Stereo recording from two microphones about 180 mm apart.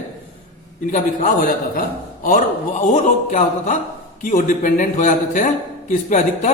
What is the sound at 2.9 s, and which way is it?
A man's voice, 40° left (ahead or behind).